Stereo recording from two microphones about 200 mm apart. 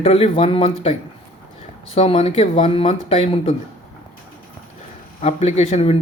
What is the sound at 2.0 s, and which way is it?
Speech, 30° left (ahead or behind).